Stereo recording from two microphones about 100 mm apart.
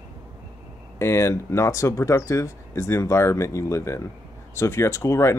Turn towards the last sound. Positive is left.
turn(degrees=30)  # may be behind; listen again after turning